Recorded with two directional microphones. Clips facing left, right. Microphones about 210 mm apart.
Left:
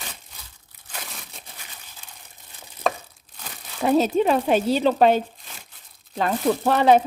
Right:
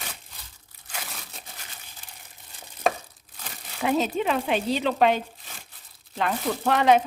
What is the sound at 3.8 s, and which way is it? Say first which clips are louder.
Speech: left 5 dB; 40° left (ahead or behind).